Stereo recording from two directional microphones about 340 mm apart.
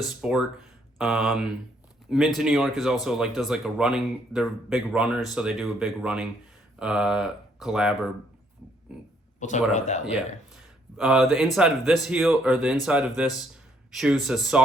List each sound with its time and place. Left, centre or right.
0.0 s speech: centre
9.4 s speech: left
10.9 s speech: centre